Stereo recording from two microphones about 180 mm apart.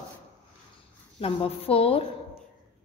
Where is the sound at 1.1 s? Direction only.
30° left (ahead or behind).